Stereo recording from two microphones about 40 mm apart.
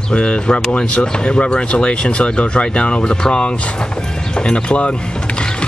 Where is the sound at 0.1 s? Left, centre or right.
Left.